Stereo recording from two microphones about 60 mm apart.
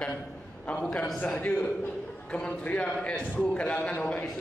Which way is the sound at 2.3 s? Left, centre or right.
Centre.